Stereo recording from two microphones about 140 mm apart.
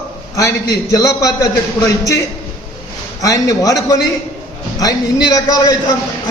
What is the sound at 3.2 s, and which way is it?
A man's voice, 25° left (ahead or behind).